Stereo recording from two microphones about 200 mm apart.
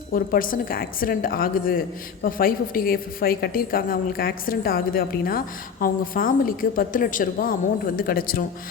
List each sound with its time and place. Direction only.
0.1 s a woman's voice: 45° left (ahead or behind)